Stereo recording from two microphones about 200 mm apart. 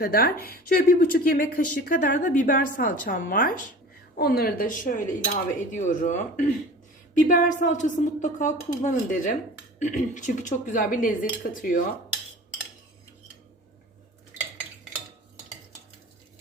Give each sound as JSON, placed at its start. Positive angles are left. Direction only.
{"t": 0.0, "sound": "a woman's voice", "side_deg": 50}